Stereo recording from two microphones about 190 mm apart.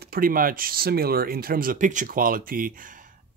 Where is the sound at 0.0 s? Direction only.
50° right (ahead or behind).